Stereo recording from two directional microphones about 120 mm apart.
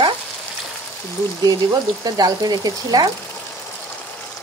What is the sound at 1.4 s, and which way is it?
Speech, 30° right (ahead or behind).